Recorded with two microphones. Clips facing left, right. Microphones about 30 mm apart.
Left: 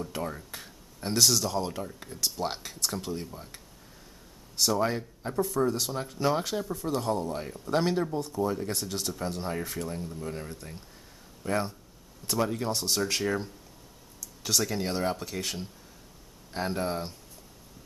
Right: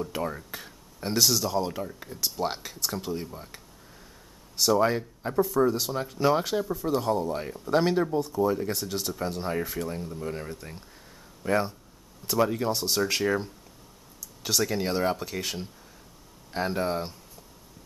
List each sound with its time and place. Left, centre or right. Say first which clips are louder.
0.0 s speech: right 3 dB; centre